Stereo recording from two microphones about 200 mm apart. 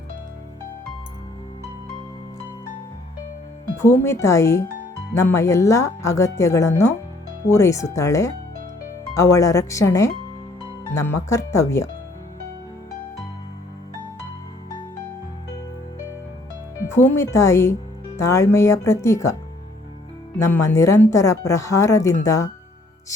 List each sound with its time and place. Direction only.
3.8 s speech: 15° left (ahead or behind)
16.8 s speech: 10° left (ahead or behind)
20.4 s speech: 15° left (ahead or behind)